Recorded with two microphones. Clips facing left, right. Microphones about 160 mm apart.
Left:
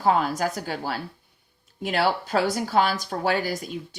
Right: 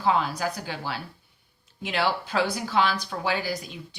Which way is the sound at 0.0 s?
45° left (ahead or behind).